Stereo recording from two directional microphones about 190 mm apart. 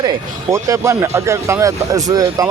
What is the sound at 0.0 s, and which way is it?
Speech, 20° right (ahead or behind).